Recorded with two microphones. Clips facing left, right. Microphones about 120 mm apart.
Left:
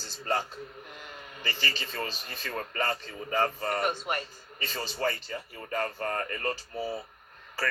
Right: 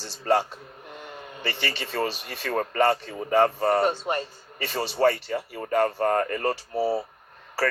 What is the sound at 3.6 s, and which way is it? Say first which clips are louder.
Speech: right 8 dB; 35° right (ahead or behind).